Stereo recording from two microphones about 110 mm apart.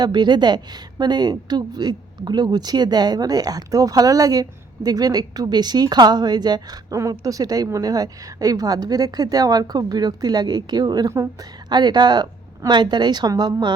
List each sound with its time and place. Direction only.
0.0 s speech: 40° right (ahead or behind)